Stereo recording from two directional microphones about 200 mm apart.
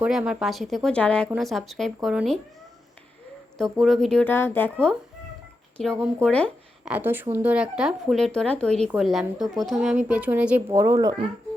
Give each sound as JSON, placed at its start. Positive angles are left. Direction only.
{"t": 0.0, "sound": "speech", "side_deg": -5}
{"t": 3.6, "sound": "speech", "side_deg": 0}
{"t": 6.8, "sound": "speech", "side_deg": -10}